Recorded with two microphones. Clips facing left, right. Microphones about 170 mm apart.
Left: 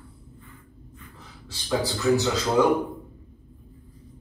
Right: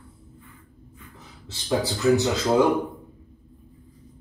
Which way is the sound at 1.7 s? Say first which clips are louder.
Right 2 dB; 20° right (ahead or behind).